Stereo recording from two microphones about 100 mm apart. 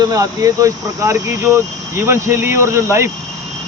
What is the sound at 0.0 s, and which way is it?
Speech, 35° right (ahead or behind).